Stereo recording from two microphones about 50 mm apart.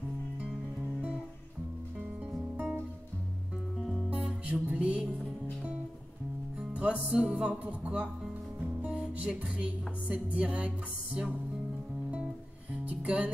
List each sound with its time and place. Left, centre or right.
2.5 s music: right
3.7 s music: centre
4.1 s music: right
6.7 s music: right
9.1 s music: right
12.8 s music: right